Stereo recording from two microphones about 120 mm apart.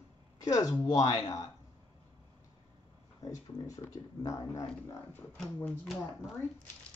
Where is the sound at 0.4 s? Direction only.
30° left (ahead or behind).